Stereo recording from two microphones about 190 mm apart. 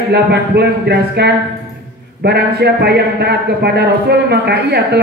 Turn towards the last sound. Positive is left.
turn(degrees=-60)  # may be behind; listen again after turning